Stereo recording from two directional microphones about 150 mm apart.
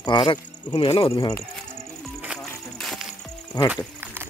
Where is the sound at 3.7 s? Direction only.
10° right (ahead or behind).